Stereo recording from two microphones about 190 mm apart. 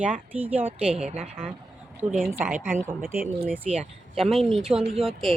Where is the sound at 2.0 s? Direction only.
10° right (ahead or behind).